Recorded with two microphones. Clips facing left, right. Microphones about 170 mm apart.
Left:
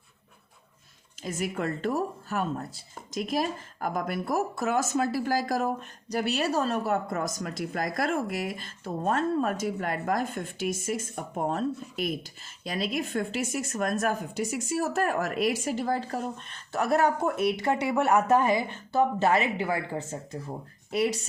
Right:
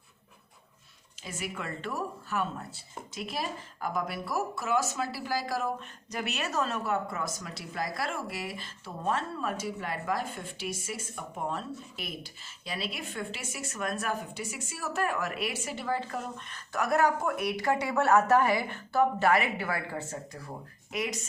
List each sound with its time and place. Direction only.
1.2 s a woman's voice: 40° left (ahead or behind); by 20.5 s 20° left (ahead or behind)
20.9 s a woman's voice: 35° left (ahead or behind)